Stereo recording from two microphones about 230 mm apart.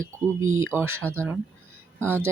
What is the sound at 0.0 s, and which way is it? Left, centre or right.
Speech, centre.